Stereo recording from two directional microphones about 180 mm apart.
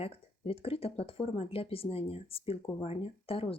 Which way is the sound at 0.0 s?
30° left (ahead or behind).